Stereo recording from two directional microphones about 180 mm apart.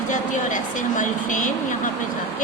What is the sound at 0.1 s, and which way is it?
A woman's voice, 45° left (ahead or behind).